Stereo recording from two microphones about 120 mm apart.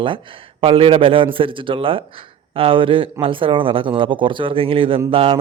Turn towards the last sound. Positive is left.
turn(degrees=-50)  # may be behind; listen again after turning